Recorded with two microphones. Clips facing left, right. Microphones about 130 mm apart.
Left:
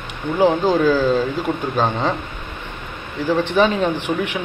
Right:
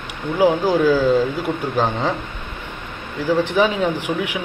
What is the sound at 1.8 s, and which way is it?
Speech, 15° left (ahead or behind).